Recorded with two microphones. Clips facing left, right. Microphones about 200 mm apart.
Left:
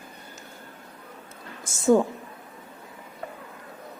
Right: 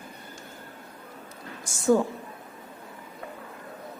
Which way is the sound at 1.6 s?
25° left (ahead or behind).